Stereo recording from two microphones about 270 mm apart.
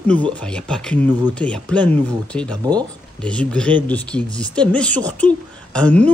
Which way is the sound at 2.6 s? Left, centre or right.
Centre.